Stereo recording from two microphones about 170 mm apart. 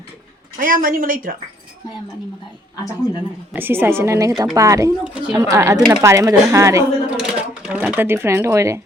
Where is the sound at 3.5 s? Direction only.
10° right (ahead or behind).